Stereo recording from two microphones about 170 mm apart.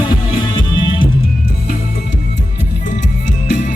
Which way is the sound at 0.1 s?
25° left (ahead or behind).